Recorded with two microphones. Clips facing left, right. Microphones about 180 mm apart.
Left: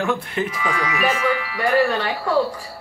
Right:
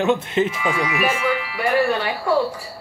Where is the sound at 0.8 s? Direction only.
10° right (ahead or behind).